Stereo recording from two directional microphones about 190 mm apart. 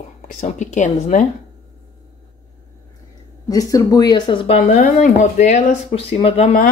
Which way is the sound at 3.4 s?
20° left (ahead or behind).